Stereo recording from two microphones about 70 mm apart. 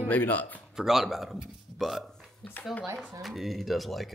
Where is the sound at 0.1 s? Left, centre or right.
Left.